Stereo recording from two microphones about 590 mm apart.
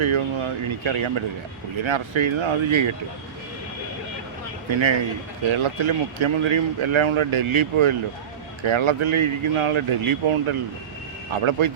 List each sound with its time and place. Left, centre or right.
0.0 s a sound: right
0.9 s speech: right
4.7 s speech: right